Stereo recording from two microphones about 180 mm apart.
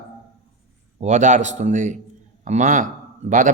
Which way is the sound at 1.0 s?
40° right (ahead or behind).